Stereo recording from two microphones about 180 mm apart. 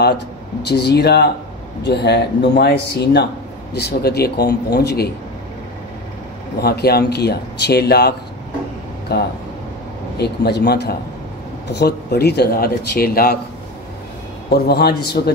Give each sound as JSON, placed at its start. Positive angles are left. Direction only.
{"t": 0.7, "sound": "speech", "side_deg": 65}
{"t": 6.6, "sound": "speech", "side_deg": 60}
{"t": 9.1, "sound": "speech", "side_deg": 65}
{"t": 14.5, "sound": "speech", "side_deg": 60}